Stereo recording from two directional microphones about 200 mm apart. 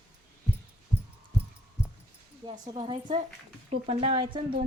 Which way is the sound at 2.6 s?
25° right (ahead or behind).